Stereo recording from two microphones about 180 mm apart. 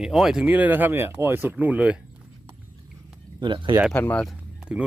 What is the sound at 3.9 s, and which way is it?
Speech, 10° left (ahead or behind).